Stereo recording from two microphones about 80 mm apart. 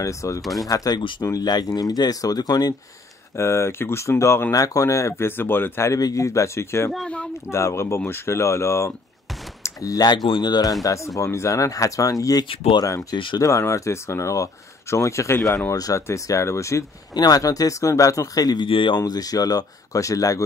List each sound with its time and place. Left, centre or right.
0.0 s speech: left
0.4 s speech: centre
0.7 s speech: left
3.3 s speech: left
5.9 s speech: left
9.6 s speech: left
13.4 s speech: left
17.1 s speech: left
19.0 s speech: left